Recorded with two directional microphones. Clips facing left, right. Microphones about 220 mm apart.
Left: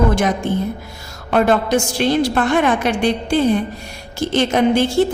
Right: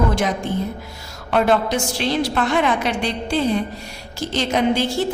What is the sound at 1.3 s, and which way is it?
A woman's voice, 50° left (ahead or behind).